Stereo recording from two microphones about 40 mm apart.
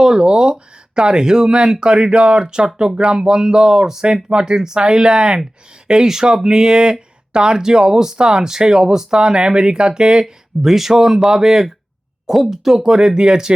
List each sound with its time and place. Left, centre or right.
0.0 s speech: centre
10.6 s speech: centre